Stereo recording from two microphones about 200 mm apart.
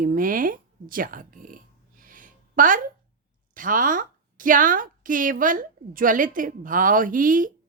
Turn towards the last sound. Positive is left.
turn(degrees=-40)  # may be behind; listen again after turning